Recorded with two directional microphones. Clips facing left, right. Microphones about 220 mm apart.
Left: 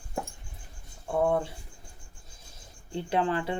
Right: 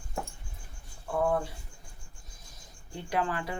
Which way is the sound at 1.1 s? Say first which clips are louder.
Left 2 dB; 25° left (ahead or behind).